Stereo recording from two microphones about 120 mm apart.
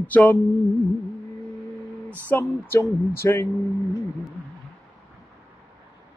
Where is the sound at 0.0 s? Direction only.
15° left (ahead or behind).